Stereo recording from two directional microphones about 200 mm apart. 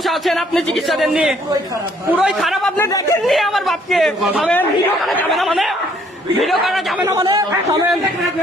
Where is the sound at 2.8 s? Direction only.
15° left (ahead or behind).